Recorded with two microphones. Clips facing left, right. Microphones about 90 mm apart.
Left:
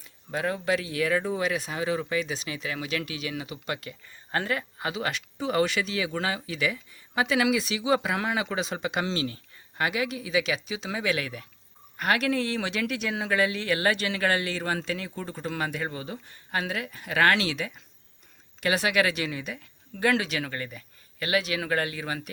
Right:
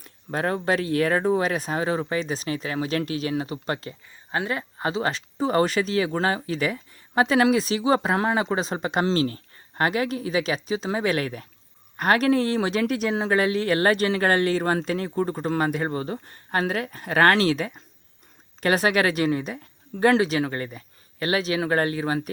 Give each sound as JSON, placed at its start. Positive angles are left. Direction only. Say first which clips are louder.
{"t": 0.0, "sound": "speech", "louder": "right 3 dB", "side_deg": -45}
{"t": 4.3, "sound": "speech", "louder": "right 2 dB", "side_deg": -15}
{"t": 4.5, "sound": "speech", "louder": "right 4 dB", "side_deg": -35}